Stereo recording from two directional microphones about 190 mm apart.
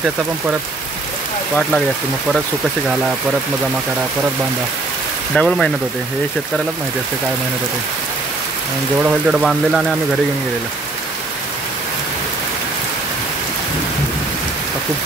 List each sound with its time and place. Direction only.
5.3 s speech: centre (ahead or behind)
9.0 s speech: 5° right (ahead or behind)